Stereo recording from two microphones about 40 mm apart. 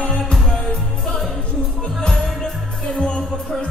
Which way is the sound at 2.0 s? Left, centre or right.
Centre.